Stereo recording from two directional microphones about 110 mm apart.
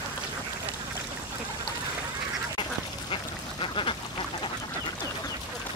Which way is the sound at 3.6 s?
50° left (ahead or behind).